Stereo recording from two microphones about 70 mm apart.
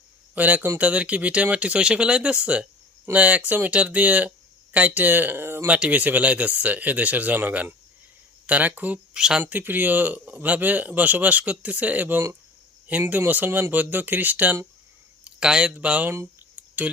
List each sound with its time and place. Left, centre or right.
0.3 s speech: right
5.6 s speech: centre
9.1 s speech: centre
9.4 s speech: right
15.2 s speech: centre
16.0 s speech: right
16.9 s speech: centre